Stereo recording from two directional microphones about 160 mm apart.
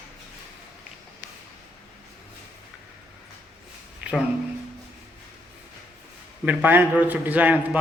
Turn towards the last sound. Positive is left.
turn(degrees=-10)  # may be behind; listen again after turning